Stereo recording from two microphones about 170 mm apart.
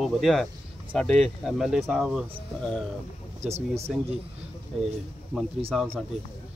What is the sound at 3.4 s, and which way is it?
Speech, 35° right (ahead or behind).